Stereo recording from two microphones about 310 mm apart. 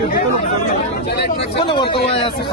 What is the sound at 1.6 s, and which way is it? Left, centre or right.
Speech, centre.